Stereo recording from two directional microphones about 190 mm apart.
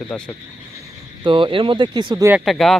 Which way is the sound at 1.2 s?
25° right (ahead or behind).